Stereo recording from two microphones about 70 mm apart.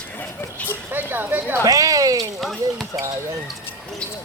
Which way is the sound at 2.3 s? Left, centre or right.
Centre.